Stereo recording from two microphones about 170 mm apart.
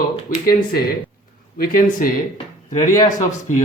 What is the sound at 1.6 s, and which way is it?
Speech, 55° left (ahead or behind).